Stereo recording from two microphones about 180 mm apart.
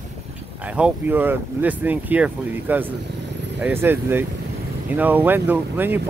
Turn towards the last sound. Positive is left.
turn(degrees=-10)  # may be behind; listen again after turning